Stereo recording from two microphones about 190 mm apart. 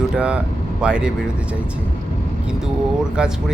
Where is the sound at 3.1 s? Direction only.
5° right (ahead or behind).